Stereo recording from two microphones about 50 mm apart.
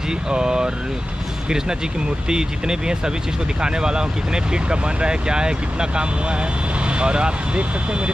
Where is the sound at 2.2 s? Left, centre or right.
Centre.